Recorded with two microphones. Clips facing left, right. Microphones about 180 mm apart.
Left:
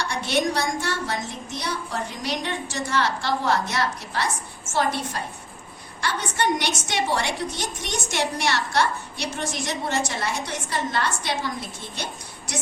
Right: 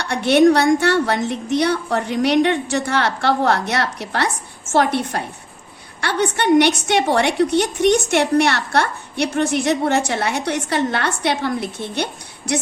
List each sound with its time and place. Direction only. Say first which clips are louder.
0.0 s a woman's voice: right 11 dB; 65° right (ahead or behind)